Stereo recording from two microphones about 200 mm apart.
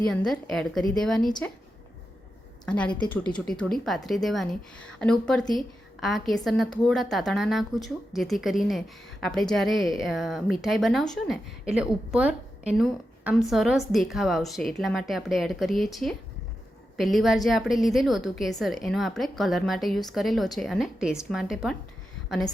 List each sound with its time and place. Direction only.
0.1 s speech: centre (ahead or behind)
2.6 s speech: 5° left (ahead or behind)